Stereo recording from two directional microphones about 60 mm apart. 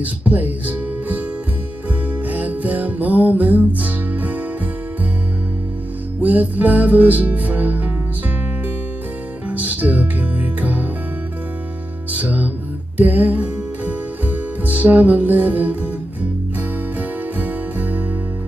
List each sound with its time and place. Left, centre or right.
0.0 s speech: right
2.2 s music: right
6.2 s music: right
9.5 s music: right
12.1 s music: right
17.4 s music: right